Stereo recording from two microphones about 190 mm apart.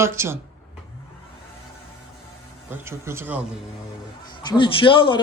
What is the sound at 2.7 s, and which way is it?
Speech, 10° right (ahead or behind).